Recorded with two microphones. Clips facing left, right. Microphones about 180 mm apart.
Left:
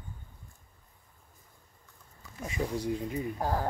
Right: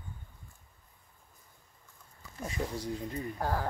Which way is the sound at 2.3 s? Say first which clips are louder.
Left 3 dB; 10° left (ahead or behind).